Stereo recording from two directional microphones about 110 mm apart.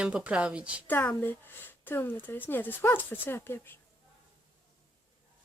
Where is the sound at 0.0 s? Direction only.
10° right (ahead or behind).